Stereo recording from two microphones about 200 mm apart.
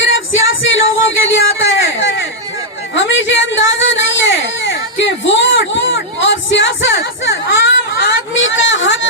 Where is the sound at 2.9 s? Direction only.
65° left (ahead or behind).